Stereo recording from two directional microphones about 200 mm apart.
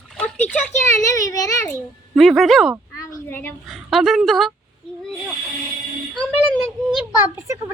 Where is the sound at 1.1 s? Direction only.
15° left (ahead or behind).